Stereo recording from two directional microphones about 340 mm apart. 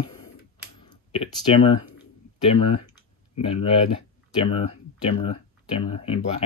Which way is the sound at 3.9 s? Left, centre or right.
Centre.